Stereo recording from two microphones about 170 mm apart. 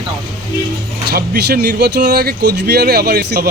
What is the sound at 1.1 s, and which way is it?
Speech, 70° right (ahead or behind).